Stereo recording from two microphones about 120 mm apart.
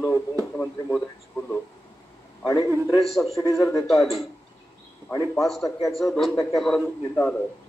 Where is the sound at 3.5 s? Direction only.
30° left (ahead or behind).